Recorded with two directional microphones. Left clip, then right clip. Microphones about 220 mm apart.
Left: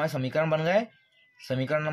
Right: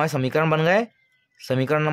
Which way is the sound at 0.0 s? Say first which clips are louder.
Right 5 dB; 45° right (ahead or behind).